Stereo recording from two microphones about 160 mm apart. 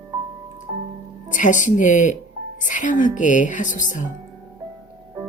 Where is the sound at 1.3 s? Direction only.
55° left (ahead or behind).